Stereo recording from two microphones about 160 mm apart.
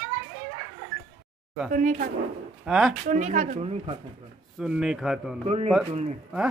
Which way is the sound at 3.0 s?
50° right (ahead or behind).